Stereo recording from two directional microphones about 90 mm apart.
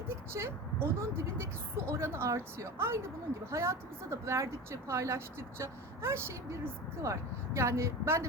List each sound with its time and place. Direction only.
0.1 s a woman's voice: 30° right (ahead or behind)